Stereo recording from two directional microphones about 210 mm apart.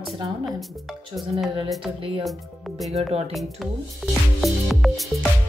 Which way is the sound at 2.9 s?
30° right (ahead or behind).